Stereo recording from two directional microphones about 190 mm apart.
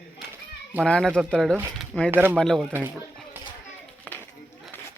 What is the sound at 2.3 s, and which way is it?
Speech, centre (ahead or behind).